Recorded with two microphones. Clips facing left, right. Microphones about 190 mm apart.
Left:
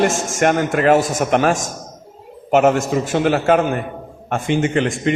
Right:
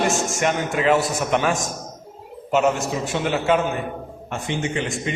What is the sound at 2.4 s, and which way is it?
Speech, 60° left (ahead or behind).